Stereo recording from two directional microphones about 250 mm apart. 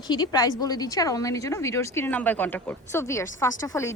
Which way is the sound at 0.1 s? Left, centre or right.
Centre.